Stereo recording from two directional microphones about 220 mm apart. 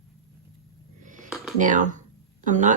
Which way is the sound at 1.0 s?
35° right (ahead or behind).